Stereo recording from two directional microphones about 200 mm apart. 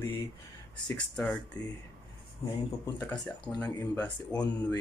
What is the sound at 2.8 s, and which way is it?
Speech, 10° left (ahead or behind).